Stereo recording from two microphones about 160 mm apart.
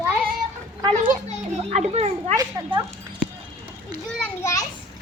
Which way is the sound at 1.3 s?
40° right (ahead or behind).